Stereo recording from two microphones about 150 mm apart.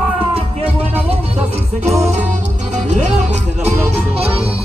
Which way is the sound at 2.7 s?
50° right (ahead or behind).